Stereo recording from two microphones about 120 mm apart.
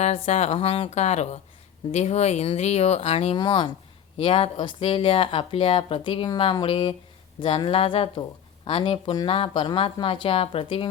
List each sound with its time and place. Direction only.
0.0 s speech: 65° left (ahead or behind)
3.3 s speech: 40° left (ahead or behind)
4.2 s speech: 50° left (ahead or behind)